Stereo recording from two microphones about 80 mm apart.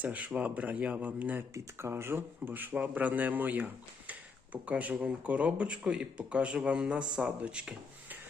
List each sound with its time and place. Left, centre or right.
0.0 s a man's voice: centre
1.5 s a man's voice: right; by 8.2 s centre